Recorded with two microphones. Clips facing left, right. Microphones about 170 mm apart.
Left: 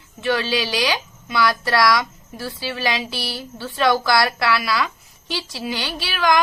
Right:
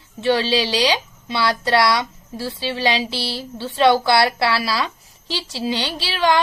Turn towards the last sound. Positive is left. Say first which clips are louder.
# right 1 dB
turn(degrees=-30)  # may be behind; listen again after turning